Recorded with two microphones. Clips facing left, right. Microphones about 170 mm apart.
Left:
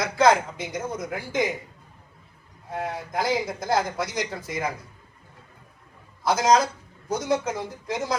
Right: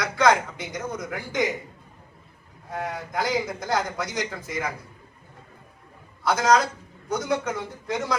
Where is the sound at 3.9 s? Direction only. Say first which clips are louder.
Left 1 dB; 30° left (ahead or behind).